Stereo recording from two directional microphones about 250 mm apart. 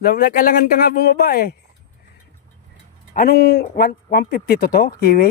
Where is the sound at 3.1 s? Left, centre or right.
Left.